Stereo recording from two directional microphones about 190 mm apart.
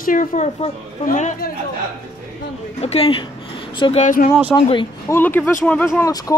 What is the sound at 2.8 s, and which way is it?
A woman's voice, 30° left (ahead or behind).